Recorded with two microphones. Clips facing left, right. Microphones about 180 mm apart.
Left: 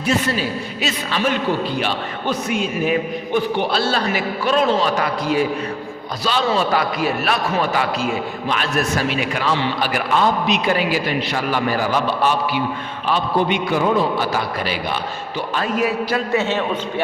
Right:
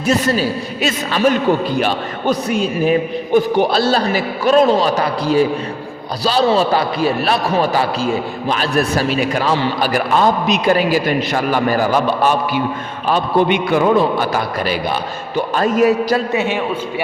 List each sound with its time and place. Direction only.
0.0 s a man's voice: 40° right (ahead or behind)
13.5 s a man's voice: 65° right (ahead or behind); by 16.2 s 40° right (ahead or behind)
16.3 s a man's voice: 15° right (ahead or behind)